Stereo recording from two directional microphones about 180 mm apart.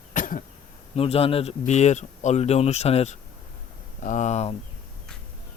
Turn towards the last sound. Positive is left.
turn(degrees=40)  # may be behind; listen again after turning